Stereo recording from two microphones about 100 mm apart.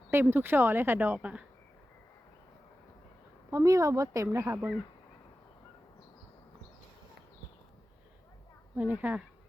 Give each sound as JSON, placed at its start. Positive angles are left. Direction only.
{"t": 0.1, "sound": "a woman's voice", "side_deg": -20}
{"t": 3.5, "sound": "speech", "side_deg": -35}
{"t": 8.8, "sound": "speech", "side_deg": -15}